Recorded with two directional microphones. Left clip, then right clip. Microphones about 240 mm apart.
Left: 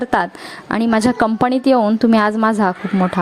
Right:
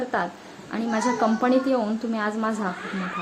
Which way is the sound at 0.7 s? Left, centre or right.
Left.